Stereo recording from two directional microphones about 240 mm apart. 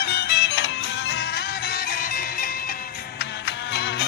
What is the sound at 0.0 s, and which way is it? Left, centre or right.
Music, left.